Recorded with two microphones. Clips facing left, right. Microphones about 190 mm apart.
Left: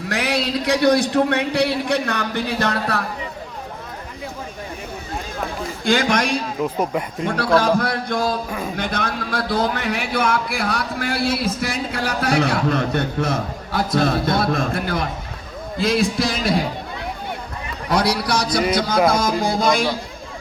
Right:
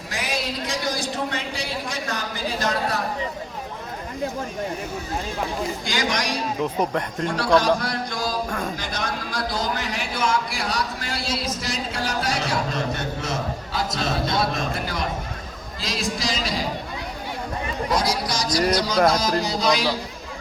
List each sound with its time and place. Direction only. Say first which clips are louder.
0.1 s a man's voice: left 6 dB; 65° left (ahead or behind)
5.8 s a man's voice: left 12 dB; 55° left (ahead or behind)
6.6 s speech: even; 5° left (ahead or behind)
7.8 s a man's voice: left 6 dB; 55° left (ahead or behind)
8.4 s speech: left 1 dB; 5° left (ahead or behind)
8.7 s a man's voice: left 5 dB; 60° left (ahead or behind)
17.8 s a man's voice: left 5 dB; 65° left (ahead or behind)
19.0 s music: left 2 dB; 50° left (ahead or behind)